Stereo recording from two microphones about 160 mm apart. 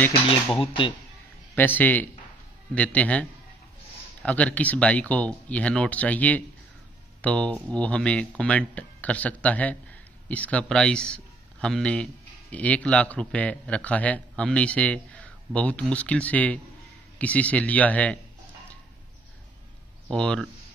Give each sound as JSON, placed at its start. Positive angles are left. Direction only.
{"t": 0.6, "sound": "speech", "side_deg": 30}
{"t": 1.5, "sound": "speech", "side_deg": 10}
{"t": 20.1, "sound": "speech", "side_deg": 5}